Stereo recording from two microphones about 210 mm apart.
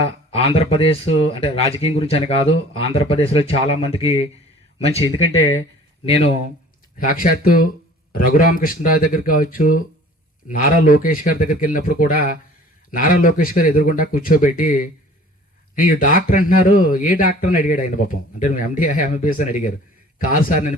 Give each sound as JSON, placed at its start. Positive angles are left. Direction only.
{"t": 0.0, "sound": "speech", "side_deg": 30}
{"t": 6.1, "sound": "speech", "side_deg": 30}
{"t": 7.0, "sound": "speech", "side_deg": 40}